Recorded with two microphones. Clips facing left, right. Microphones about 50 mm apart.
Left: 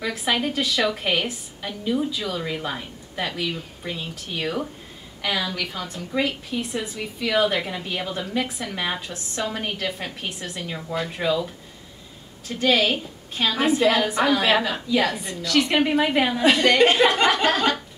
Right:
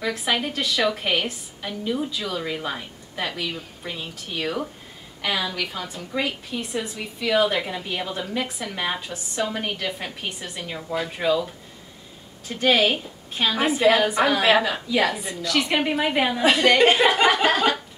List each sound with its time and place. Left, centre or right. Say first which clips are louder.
0.0 s a woman's voice: even; centre